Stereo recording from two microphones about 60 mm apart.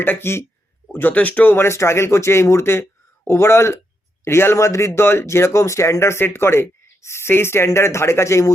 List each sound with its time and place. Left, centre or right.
0.0 s speech: left
0.9 s speech: left
1.6 s a man's voice: left
4.5 s speech: left
4.9 s speech: left